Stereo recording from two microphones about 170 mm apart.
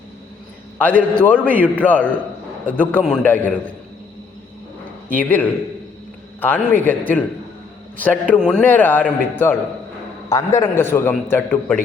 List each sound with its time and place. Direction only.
0.8 s a man's voice: 10° left (ahead or behind)
5.1 s a man's voice: 10° left (ahead or behind)